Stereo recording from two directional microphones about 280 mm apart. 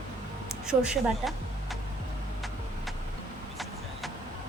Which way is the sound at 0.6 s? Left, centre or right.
Centre.